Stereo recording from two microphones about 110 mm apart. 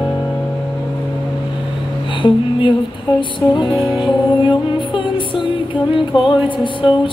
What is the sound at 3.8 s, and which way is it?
Music, 45° left (ahead or behind).